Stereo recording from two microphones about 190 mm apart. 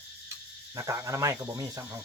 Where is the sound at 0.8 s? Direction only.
15° right (ahead or behind).